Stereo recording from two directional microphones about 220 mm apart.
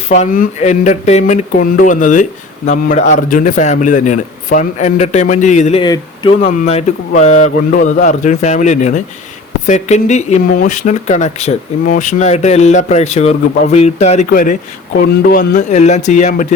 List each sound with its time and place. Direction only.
0.1 s speech: 35° left (ahead or behind)
5.8 s speech: 20° left (ahead or behind)